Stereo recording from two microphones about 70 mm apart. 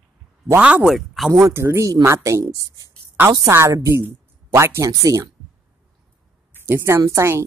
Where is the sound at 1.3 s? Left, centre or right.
Right.